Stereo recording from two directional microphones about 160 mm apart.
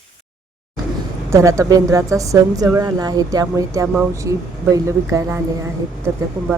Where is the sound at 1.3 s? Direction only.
20° right (ahead or behind).